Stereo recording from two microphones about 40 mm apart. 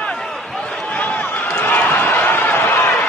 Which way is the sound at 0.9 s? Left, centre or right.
Left.